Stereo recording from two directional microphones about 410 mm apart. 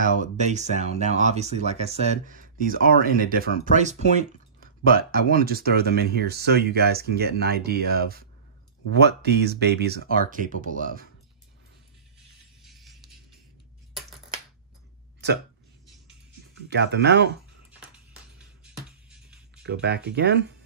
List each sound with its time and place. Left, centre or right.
0.0 s speech: centre
12.6 s music: centre
16.6 s speech: right
18.6 s music: centre
19.6 s speech: right